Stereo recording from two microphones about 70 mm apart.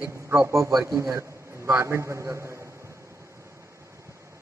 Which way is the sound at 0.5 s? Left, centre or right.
Right.